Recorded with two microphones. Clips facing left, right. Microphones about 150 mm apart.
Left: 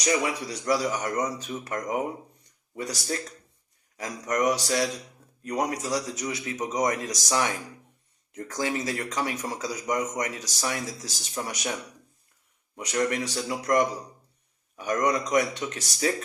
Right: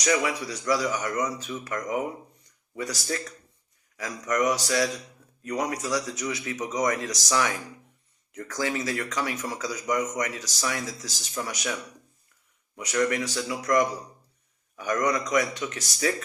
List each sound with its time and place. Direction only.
0.0 s speech: 25° left (ahead or behind)
12.9 s speech: 30° left (ahead or behind)